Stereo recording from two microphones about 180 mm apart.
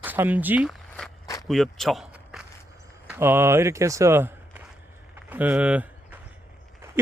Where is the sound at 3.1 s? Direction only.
10° right (ahead or behind).